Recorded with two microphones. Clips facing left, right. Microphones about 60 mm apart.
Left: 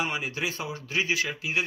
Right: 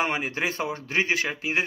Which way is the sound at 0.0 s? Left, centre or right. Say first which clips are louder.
Right 4 dB; right.